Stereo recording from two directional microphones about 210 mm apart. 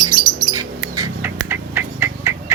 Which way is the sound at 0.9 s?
15° right (ahead or behind).